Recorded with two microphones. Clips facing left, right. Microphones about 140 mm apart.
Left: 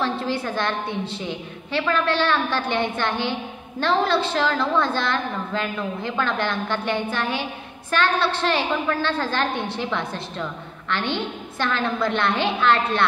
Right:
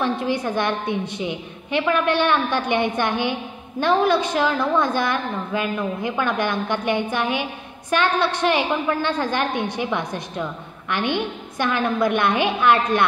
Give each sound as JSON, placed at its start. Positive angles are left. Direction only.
{"t": 0.0, "sound": "a woman's voice", "side_deg": -15}